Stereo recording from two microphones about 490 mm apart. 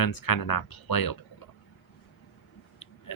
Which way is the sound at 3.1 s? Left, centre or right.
Left.